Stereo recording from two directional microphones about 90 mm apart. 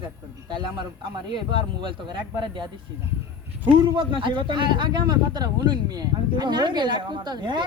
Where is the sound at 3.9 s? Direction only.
60° right (ahead or behind).